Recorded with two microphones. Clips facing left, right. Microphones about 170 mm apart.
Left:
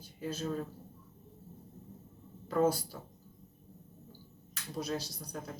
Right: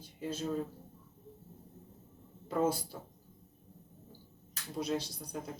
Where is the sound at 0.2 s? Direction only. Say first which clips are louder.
Even; 25° right (ahead or behind).